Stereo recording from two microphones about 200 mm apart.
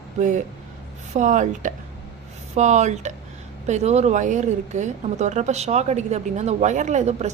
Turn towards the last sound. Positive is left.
turn(degrees=-35)  # may be behind; listen again after turning